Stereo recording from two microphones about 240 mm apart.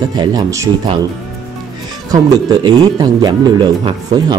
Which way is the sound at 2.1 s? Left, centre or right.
Centre.